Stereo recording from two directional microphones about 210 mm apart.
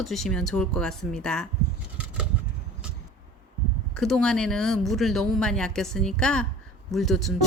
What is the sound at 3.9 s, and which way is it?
Speech, 5° left (ahead or behind).